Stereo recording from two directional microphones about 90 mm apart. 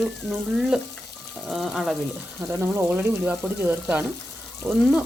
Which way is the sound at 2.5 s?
25° right (ahead or behind).